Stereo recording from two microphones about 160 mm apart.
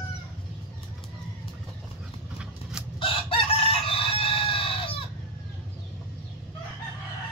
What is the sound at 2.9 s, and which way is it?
Chicken, 35° left (ahead or behind).